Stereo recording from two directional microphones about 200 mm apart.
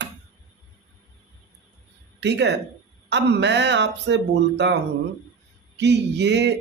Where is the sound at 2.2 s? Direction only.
60° right (ahead or behind).